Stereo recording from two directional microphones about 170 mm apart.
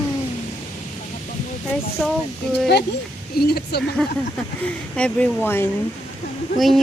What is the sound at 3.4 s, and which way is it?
Speech, 65° left (ahead or behind).